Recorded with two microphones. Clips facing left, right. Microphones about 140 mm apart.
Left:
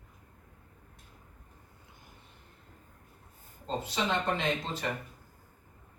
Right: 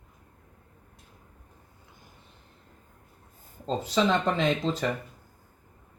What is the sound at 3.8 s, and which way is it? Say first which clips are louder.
Speech: right 7 dB; 90° right.